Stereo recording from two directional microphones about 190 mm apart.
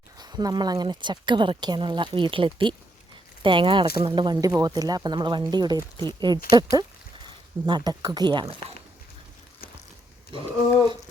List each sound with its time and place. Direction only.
0.2 s speech: 20° right (ahead or behind)
10.3 s speech: 25° right (ahead or behind)